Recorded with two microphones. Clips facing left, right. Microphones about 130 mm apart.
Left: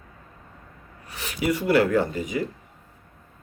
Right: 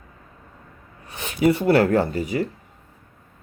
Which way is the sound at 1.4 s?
30° right (ahead or behind).